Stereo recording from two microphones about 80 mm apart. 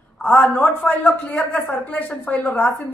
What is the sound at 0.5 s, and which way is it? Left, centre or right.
Speech, centre.